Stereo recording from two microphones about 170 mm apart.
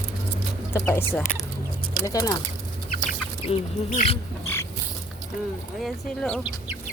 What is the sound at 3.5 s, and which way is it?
Speech, 40° left (ahead or behind).